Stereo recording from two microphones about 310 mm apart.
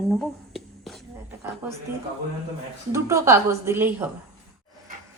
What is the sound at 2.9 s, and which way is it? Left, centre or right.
Speech, centre.